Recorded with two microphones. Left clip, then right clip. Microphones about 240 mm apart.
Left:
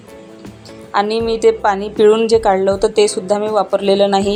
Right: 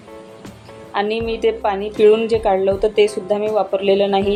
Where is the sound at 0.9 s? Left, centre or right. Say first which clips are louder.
Left 4 dB; left.